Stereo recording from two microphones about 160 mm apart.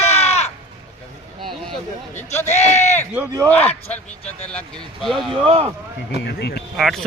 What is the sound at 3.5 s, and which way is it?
Speech, 10° left (ahead or behind).